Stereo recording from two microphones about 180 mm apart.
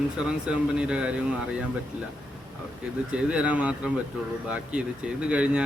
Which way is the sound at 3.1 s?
5° right (ahead or behind).